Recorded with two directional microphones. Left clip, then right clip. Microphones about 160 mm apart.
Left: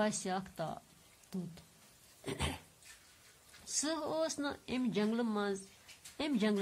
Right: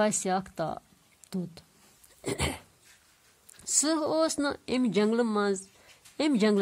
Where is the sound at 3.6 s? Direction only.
55° right (ahead or behind).